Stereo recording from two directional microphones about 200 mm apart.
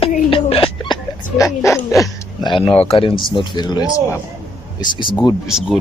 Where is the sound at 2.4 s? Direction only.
25° left (ahead or behind).